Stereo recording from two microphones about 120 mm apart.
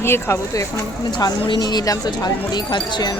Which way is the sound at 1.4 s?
40° left (ahead or behind).